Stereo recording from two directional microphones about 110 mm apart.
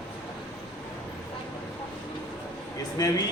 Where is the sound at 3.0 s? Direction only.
35° left (ahead or behind).